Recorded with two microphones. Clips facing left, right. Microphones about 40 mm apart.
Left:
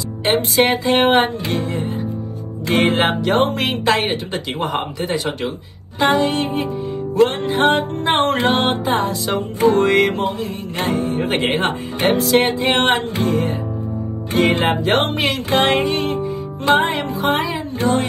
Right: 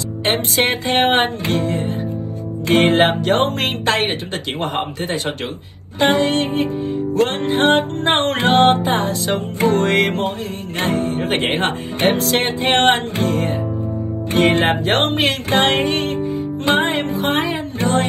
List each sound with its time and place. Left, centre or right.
0.2 s music: right